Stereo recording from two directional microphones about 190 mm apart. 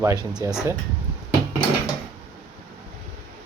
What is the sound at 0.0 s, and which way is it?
Speech, 15° right (ahead or behind).